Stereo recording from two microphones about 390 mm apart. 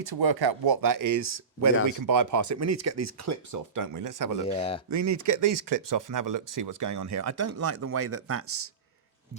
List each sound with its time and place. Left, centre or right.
0.0 s speech: right
4.4 s speech: centre
4.9 s speech: right